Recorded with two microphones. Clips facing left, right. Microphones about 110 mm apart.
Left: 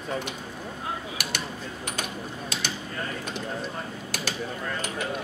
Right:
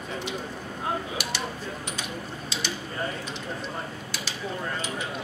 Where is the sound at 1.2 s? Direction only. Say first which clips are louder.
Right 1 dB; 50° left (ahead or behind).